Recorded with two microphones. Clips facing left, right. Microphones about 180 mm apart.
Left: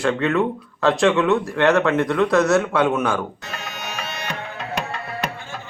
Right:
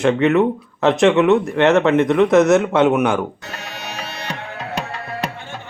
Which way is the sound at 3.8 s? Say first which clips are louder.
Right 1 dB; 35° right (ahead or behind).